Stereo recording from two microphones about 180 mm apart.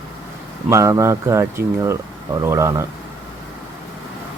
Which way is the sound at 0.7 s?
15° right (ahead or behind).